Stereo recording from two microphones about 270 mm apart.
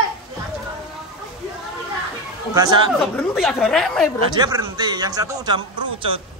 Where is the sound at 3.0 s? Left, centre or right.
Centre.